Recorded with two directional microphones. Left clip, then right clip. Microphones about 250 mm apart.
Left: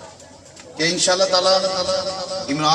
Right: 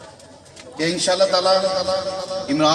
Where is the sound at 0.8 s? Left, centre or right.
Centre.